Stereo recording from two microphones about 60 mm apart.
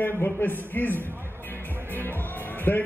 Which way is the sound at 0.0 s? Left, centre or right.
Left.